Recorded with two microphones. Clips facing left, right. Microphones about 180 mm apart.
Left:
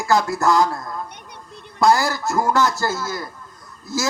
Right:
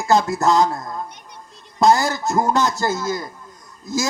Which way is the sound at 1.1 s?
60° left (ahead or behind).